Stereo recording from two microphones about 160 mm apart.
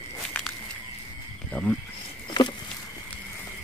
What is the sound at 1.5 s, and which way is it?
Speech, 10° left (ahead or behind).